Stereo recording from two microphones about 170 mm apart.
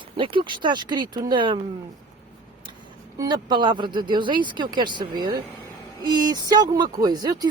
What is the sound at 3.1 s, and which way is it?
A woman's voice, 25° right (ahead or behind).